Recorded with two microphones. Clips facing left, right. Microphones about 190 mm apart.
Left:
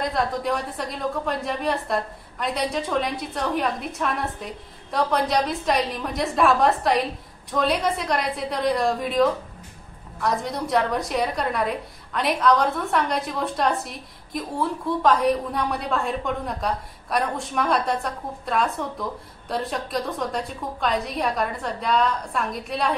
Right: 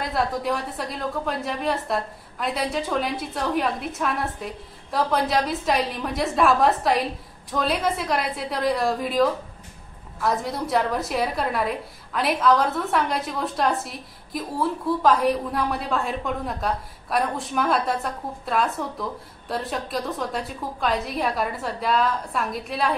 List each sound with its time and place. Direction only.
0.0 s a woman's voice: 5° right (ahead or behind)